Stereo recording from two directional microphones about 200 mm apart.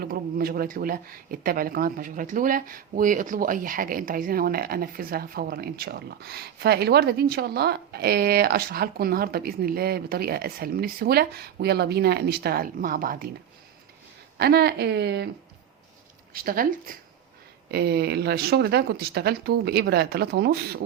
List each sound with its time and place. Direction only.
0.0 s speech: 50° right (ahead or behind)
14.3 s speech: 55° right (ahead or behind)
16.3 s speech: 45° right (ahead or behind)